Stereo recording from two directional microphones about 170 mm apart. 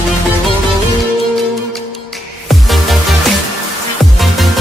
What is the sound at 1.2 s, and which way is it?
Music, centre (ahead or behind).